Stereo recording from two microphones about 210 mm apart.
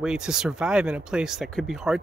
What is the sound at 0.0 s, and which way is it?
Speech, 5° right (ahead or behind).